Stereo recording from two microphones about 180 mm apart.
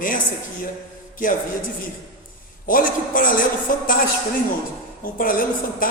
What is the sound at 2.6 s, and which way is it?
Speech, 50° left (ahead or behind).